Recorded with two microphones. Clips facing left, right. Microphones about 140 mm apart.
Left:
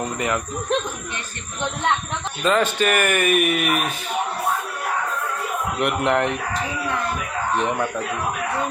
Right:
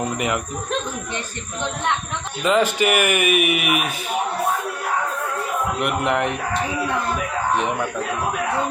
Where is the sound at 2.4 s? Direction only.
15° right (ahead or behind).